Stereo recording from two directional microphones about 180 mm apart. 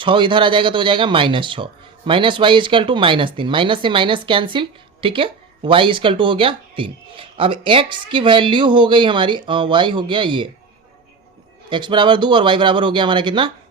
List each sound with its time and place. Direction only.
0.0 s speech: 25° right (ahead or behind)
11.7 s speech: 25° right (ahead or behind)